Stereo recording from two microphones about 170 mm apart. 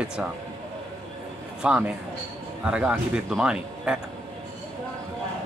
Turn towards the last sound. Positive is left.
turn(degrees=-5)  # may be behind; listen again after turning